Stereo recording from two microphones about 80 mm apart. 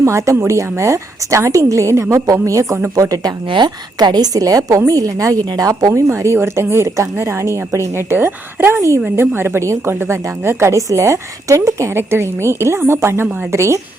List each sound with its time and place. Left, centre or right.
0.0 s a woman's voice: right
3.5 s a woman's voice: right
5.9 s a woman's voice: right
8.1 s a woman's voice: right
9.0 s a woman's voice: right